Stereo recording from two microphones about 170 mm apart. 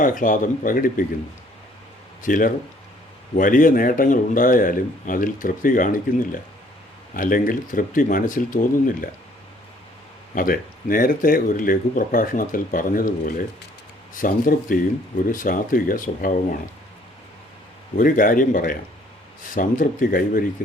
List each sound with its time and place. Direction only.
0.0 s a man's voice: 50° left (ahead or behind)
2.2 s a man's voice: 50° left (ahead or behind)
10.3 s a man's voice: 55° left (ahead or behind)
17.9 s a man's voice: 55° left (ahead or behind)